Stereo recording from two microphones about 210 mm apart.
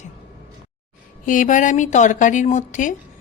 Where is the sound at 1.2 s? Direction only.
40° left (ahead or behind).